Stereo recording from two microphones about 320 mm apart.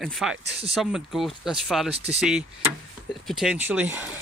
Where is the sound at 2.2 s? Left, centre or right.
Centre.